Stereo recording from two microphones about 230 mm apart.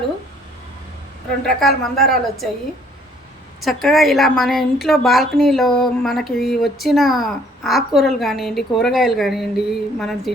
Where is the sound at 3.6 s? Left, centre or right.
Centre.